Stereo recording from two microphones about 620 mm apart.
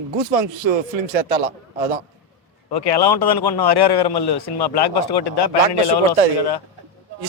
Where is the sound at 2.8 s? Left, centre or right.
Left.